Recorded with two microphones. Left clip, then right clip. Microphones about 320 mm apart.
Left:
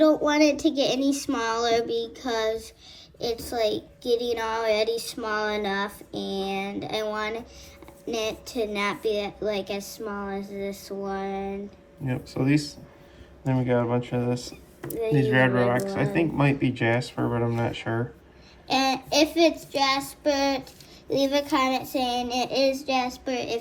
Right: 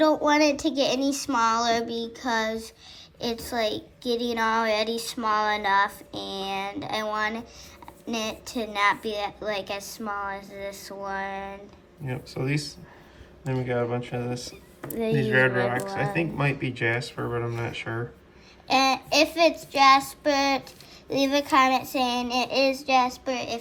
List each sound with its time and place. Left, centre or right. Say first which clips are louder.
0.3 s a woman's voice: even; right
12.0 s speech: left 4 dB; centre
18.7 s a woman's voice: right 2 dB; right